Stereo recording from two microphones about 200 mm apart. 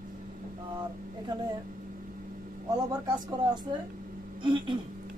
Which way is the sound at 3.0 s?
20° right (ahead or behind).